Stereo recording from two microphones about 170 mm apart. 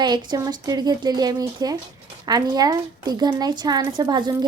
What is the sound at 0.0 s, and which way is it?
A woman's voice, 25° right (ahead or behind).